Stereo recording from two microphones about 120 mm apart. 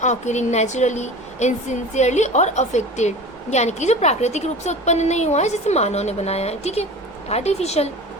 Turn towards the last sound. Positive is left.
turn(degrees=65)  # may be behind; listen again after turning